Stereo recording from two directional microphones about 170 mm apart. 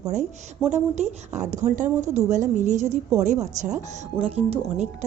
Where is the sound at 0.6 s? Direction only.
40° right (ahead or behind).